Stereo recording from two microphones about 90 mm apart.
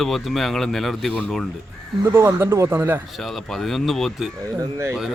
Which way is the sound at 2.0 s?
35° right (ahead or behind).